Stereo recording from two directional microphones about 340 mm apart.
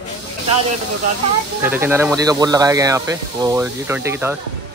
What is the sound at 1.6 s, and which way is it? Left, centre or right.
Speech, centre.